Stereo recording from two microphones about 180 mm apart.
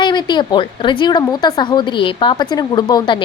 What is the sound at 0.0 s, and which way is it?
A woman's voice, 25° left (ahead or behind).